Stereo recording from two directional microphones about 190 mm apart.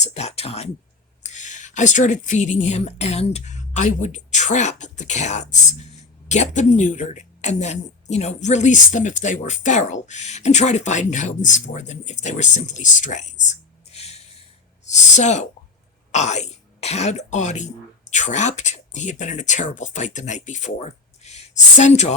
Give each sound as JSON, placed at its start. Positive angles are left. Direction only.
{"t": 0.0, "sound": "speech", "side_deg": 35}